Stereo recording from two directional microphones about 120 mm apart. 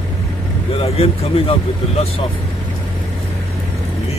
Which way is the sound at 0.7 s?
55° left (ahead or behind).